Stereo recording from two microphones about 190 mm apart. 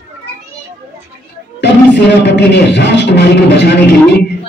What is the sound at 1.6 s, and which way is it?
Speech, 65° left (ahead or behind).